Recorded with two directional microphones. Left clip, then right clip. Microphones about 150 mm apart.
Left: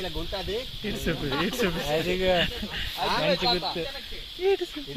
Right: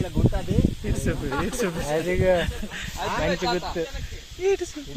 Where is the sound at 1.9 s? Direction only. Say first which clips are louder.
Right 5 dB; 40° right (ahead or behind).